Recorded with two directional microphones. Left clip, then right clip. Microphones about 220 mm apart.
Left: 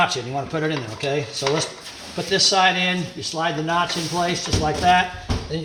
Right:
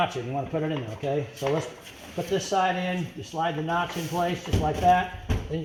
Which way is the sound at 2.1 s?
10° left (ahead or behind).